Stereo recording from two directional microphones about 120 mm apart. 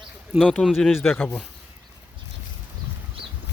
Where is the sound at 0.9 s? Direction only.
15° left (ahead or behind).